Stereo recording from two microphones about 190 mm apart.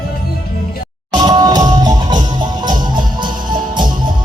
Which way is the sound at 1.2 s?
20° right (ahead or behind).